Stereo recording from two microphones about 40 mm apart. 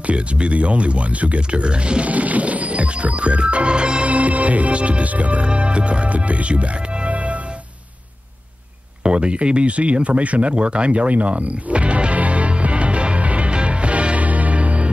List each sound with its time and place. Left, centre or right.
0.0 s speech: right
4.1 s speech: right
9.0 s a sound: right